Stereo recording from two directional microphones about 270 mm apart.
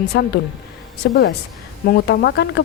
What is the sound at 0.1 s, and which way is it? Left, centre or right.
A woman's voice, left.